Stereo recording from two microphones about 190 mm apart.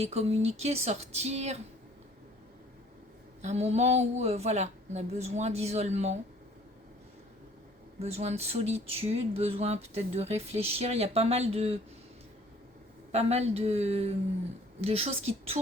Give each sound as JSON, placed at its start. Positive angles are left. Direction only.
{"t": 0.0, "sound": "speech", "side_deg": -35}
{"t": 3.4, "sound": "speech", "side_deg": -35}
{"t": 8.0, "sound": "speech", "side_deg": -35}
{"t": 13.1, "sound": "speech", "side_deg": -35}